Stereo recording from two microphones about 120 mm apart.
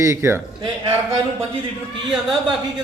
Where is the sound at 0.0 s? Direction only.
25° right (ahead or behind).